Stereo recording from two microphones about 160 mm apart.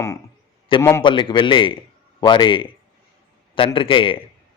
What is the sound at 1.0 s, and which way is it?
A man's voice, 30° left (ahead or behind).